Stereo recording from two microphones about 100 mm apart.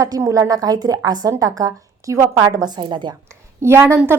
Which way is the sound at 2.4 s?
45° right (ahead or behind).